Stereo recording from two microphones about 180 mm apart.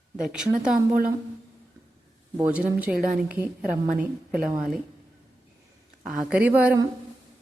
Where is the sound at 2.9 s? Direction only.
55° right (ahead or behind).